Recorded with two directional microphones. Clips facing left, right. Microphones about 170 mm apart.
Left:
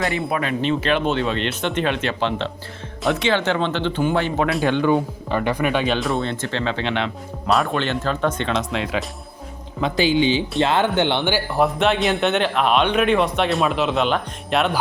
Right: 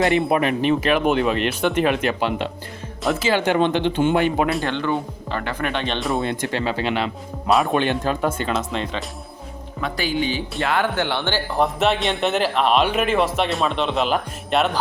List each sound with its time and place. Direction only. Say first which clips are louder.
0.0 s speech: right 5 dB; 20° right (ahead or behind)
4.6 s speech: left 5 dB; 15° left (ahead or behind)
6.2 s speech: right 1 dB; 10° right (ahead or behind)
7.7 s speech: right 2 dB; 15° right (ahead or behind); by 9.0 s centre (ahead or behind)
9.8 s speech: left 5 dB; 25° left (ahead or behind); by 14.8 s centre (ahead or behind)